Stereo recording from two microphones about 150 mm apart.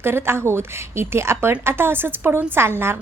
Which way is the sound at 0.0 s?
15° right (ahead or behind).